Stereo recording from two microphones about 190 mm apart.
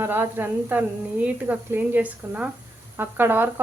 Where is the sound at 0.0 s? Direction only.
10° right (ahead or behind).